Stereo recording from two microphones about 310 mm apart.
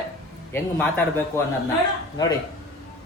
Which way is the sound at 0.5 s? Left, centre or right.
Centre.